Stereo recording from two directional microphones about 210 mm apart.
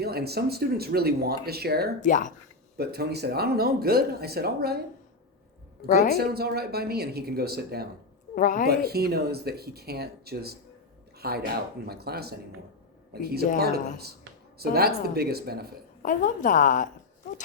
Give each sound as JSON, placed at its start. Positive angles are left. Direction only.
{"t": 0.0, "sound": "speech", "side_deg": -50}
{"t": 2.0, "sound": "a woman's voice", "side_deg": 35}
{"t": 2.7, "sound": "speech", "side_deg": -50}
{"t": 5.8, "sound": "a woman's voice", "side_deg": 40}
{"t": 6.1, "sound": "speech", "side_deg": -50}
{"t": 8.4, "sound": "a woman's voice", "side_deg": 40}
{"t": 8.7, "sound": "speech", "side_deg": -50}
{"t": 14.6, "sound": "speech", "side_deg": -50}
{"t": 16.0, "sound": "a woman's voice", "side_deg": 40}